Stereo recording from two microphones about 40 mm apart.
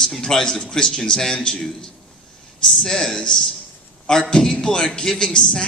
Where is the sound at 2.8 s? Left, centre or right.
Centre.